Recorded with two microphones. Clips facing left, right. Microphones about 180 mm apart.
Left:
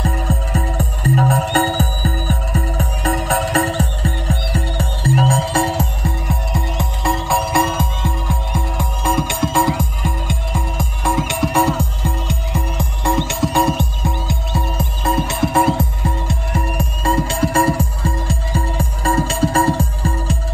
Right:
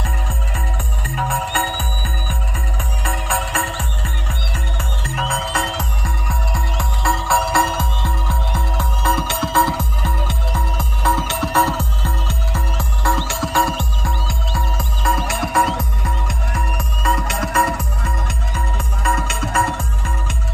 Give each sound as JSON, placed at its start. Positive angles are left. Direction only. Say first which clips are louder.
{"t": 0.0, "sound": "music", "louder": "left 7 dB", "side_deg": 40}